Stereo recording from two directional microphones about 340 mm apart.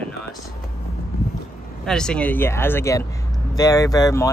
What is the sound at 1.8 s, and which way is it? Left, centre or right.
Speech, centre.